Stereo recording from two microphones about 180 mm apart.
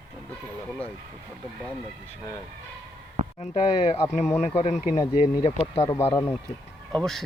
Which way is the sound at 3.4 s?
35° left (ahead or behind).